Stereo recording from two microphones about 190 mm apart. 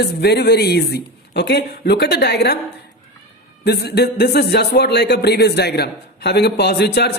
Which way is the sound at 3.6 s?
60° left (ahead or behind).